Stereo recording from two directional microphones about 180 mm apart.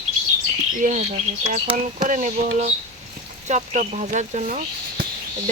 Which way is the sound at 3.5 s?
40° right (ahead or behind).